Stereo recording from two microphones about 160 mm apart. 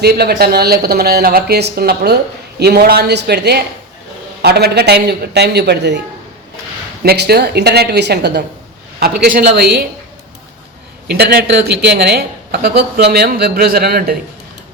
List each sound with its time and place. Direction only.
0.0 s speech: 85° right
2.6 s a man's voice: 85° right
7.0 s a man's voice: 80° right
11.1 s speech: 75° right (ahead or behind)